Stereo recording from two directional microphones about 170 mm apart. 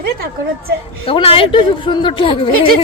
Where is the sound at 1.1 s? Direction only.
30° left (ahead or behind).